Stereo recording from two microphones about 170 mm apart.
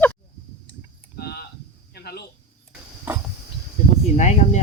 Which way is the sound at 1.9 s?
70° left (ahead or behind).